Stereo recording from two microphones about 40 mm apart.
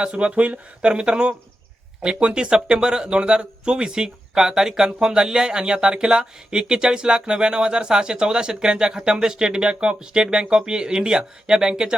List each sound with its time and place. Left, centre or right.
0.0 s speech: right